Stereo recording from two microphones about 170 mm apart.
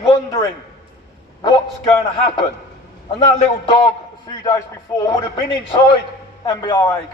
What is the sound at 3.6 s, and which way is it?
A man's voice, 25° left (ahead or behind).